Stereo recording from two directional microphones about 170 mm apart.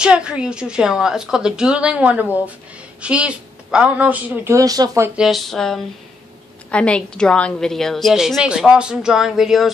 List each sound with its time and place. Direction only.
0.0 s a woman's voice: 5° right (ahead or behind)
4.6 s speech: 20° right (ahead or behind)
5.1 s a woman's voice: centre (ahead or behind)